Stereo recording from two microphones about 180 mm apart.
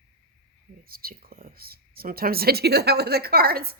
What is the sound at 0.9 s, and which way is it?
Speech, 55° right (ahead or behind).